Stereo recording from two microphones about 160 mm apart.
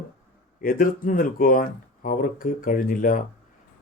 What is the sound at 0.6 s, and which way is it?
Speech, 60° left (ahead or behind).